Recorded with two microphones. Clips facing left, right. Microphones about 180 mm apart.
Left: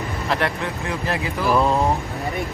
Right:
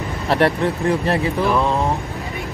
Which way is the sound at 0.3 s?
30° right (ahead or behind).